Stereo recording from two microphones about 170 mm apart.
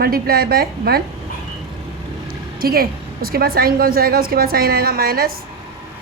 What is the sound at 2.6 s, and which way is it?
A woman's voice, 60° right (ahead or behind).